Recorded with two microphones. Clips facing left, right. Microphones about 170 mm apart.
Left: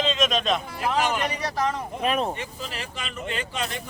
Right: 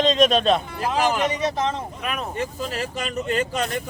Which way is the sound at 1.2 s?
20° right (ahead or behind).